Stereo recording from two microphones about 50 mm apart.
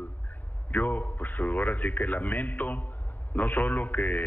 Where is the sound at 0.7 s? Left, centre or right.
Left.